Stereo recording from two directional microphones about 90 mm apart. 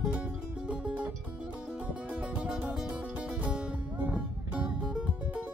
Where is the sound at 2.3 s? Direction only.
15° right (ahead or behind).